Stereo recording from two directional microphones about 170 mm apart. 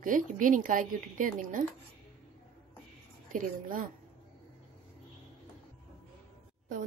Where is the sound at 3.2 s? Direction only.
50° right (ahead or behind).